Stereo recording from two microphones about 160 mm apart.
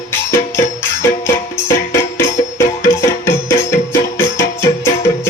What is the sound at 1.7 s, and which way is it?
Music, 15° left (ahead or behind).